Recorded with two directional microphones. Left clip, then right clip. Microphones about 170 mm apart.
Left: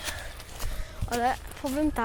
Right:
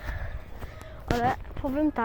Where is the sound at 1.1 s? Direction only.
20° left (ahead or behind).